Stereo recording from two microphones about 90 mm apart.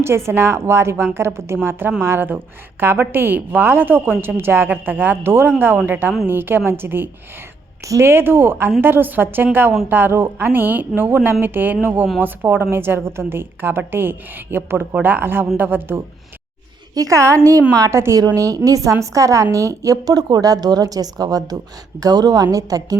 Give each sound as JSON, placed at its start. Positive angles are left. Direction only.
{"t": 0.3, "sound": "a woman's voice", "side_deg": -30}
{"t": 16.9, "sound": "a woman's voice", "side_deg": -40}